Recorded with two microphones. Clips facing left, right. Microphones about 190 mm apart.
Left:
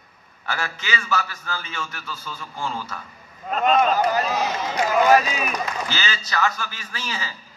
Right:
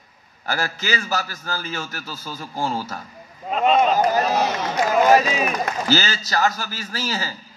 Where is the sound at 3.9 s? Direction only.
45° right (ahead or behind).